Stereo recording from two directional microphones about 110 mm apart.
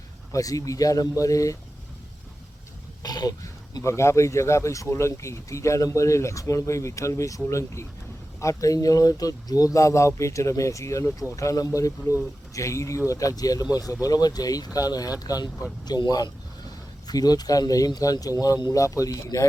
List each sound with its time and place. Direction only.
0.3 s speech: 30° left (ahead or behind)
3.0 s speech: 35° left (ahead or behind)